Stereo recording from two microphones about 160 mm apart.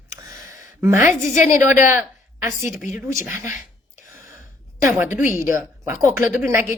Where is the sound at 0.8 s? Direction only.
15° right (ahead or behind).